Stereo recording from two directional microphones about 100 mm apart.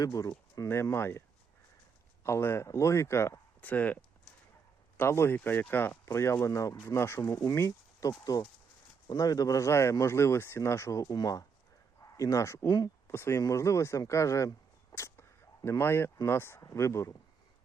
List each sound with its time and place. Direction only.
0.0 s speech: 35° left (ahead or behind)
0.7 s speech: 25° left (ahead or behind)
2.2 s speech: 25° left (ahead or behind)
3.6 s speech: 15° left (ahead or behind)
6.1 s speech: 30° left (ahead or behind)
14.9 s a sound: 25° left (ahead or behind)
15.8 s speech: 25° left (ahead or behind)